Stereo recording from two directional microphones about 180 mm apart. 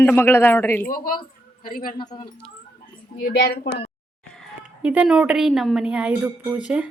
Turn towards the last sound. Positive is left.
turn(degrees=-5)  # may be behind; listen again after turning